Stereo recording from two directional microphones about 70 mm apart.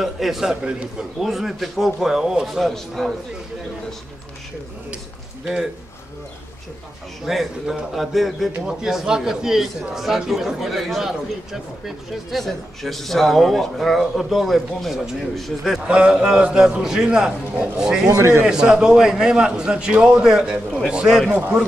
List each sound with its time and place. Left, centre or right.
0.0 s a man's voice: centre
0.7 s a man's voice: centre
1.2 s a man's voice: centre
7.2 s a man's voice: centre
15.9 s a man's voice: centre
18.0 s a man's voice: right
18.4 s a man's voice: centre
21.3 s a man's voice: right